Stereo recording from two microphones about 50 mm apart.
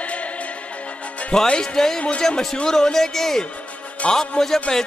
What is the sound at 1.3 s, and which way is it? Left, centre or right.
Speech, centre.